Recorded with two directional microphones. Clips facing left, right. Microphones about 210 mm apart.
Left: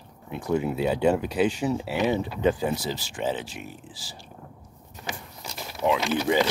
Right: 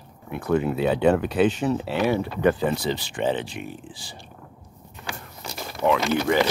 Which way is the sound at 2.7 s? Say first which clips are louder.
Right 5 dB; 60° right (ahead or behind).